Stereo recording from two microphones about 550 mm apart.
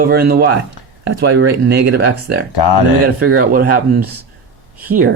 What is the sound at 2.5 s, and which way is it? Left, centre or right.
Speech, left.